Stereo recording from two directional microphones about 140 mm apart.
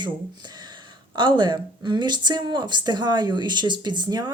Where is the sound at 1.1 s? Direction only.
35° right (ahead or behind).